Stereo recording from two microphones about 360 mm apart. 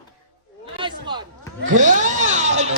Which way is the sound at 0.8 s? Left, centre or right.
Centre.